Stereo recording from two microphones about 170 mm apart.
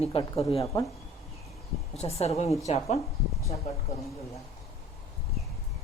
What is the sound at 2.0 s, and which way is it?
Speech, 35° left (ahead or behind).